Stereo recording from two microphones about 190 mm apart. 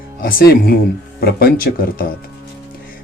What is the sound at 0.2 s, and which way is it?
Speech, 50° left (ahead or behind).